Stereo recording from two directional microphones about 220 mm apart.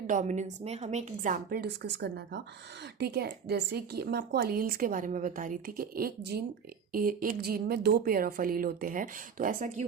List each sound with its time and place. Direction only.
0.1 s a woman's voice: 35° right (ahead or behind)